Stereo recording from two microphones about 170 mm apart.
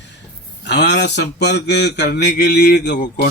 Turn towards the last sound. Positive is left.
turn(degrees=85)